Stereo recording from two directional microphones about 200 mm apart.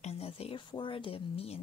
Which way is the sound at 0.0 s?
30° left (ahead or behind).